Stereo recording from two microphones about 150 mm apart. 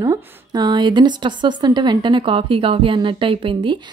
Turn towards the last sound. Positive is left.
turn(degrees=-35)  # may be behind; listen again after turning